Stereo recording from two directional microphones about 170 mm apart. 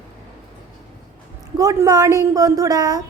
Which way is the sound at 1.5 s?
20° right (ahead or behind).